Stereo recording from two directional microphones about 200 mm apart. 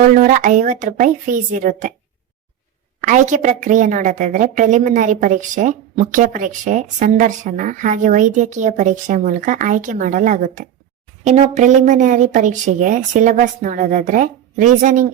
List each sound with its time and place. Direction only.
0.0 s a woman's voice: 45° right (ahead or behind)
3.0 s a woman's voice: 40° right (ahead or behind)